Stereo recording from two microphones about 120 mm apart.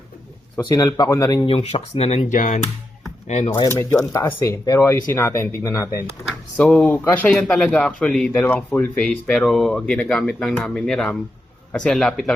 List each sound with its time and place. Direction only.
0.7 s speech: 30° left (ahead or behind)
1.5 s speech: 55° left (ahead or behind)
3.8 s speech: 25° left (ahead or behind)
6.6 s speech: 10° left (ahead or behind)